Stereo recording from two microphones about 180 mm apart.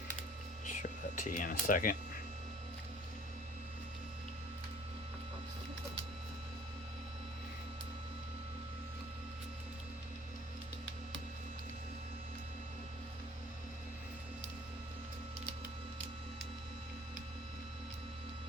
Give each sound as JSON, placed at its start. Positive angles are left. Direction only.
{"t": 0.7, "sound": "whispering", "side_deg": 45}